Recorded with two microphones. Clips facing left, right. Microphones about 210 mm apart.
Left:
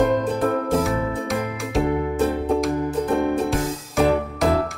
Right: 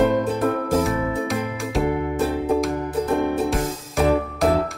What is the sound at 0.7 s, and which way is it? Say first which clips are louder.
Music: right 1 dB; centre (ahead or behind).